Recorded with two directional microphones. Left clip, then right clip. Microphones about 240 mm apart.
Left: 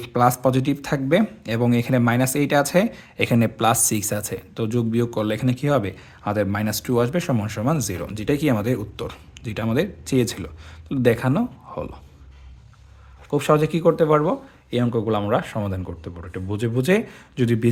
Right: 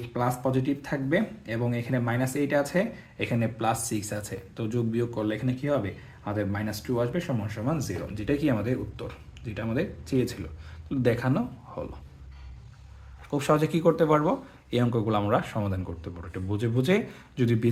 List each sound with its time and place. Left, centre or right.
0.0 s speech: left
13.3 s speech: left